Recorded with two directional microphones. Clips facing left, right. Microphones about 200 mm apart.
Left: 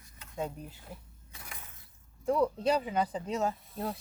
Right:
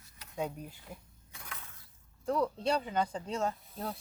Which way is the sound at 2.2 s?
5° left (ahead or behind).